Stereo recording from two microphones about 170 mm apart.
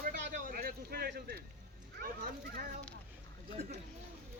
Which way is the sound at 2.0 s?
65° right (ahead or behind).